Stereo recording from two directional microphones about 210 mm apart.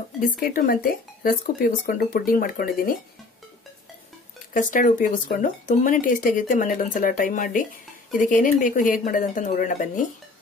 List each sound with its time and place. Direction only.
0.4 s speech: 40° left (ahead or behind)
4.6 s speech: 40° left (ahead or behind)